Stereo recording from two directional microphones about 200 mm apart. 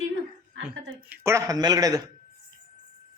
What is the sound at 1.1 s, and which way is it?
Speech, 15° right (ahead or behind).